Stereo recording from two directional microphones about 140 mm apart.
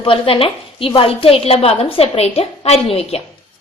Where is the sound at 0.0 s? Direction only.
40° left (ahead or behind).